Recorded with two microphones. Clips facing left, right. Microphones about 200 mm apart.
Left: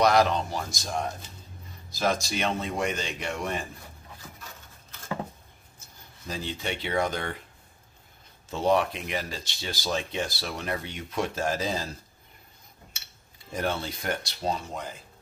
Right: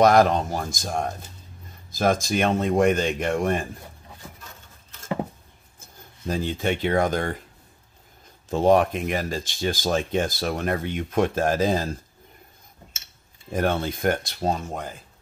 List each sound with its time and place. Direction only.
0.0 s speech: 50° right (ahead or behind)
6.2 s speech: 50° right (ahead or behind)
8.5 s speech: 45° right (ahead or behind)
13.5 s speech: 50° right (ahead or behind)